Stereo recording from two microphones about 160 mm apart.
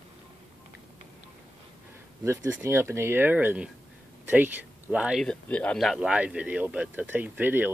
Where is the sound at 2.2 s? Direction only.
15° right (ahead or behind).